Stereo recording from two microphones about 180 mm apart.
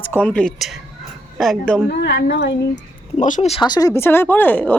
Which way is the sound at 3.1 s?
40° left (ahead or behind).